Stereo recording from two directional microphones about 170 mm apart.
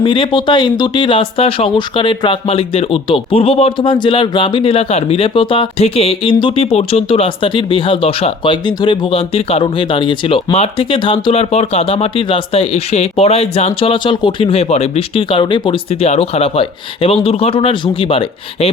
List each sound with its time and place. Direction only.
0.0 s speech: 30° left (ahead or behind)